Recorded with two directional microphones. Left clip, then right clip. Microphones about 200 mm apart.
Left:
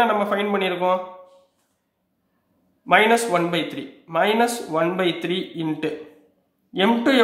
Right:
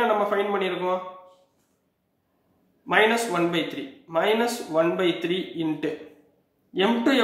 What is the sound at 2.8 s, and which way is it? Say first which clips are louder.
Speech: left 4 dB; 35° left (ahead or behind).